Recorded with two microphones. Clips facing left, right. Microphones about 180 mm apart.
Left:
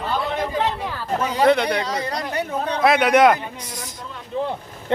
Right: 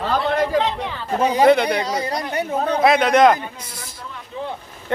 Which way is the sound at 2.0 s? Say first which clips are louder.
Right 2 dB; 25° right (ahead or behind).